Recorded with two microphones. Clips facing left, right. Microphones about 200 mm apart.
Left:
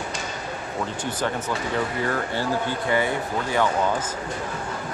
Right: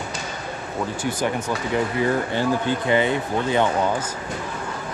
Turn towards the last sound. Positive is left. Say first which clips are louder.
# right 2 dB
turn(degrees=-20)  # may be behind; listen again after turning